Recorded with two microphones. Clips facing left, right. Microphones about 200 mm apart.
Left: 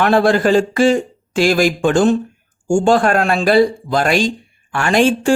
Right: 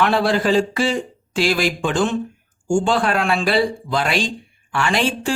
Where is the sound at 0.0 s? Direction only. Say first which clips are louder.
Left 5 dB; 50° left (ahead or behind).